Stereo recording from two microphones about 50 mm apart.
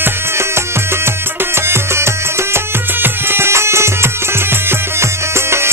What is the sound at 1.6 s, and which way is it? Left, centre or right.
Music, right.